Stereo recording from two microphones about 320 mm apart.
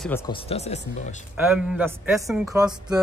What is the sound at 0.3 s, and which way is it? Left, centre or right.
Speech, centre.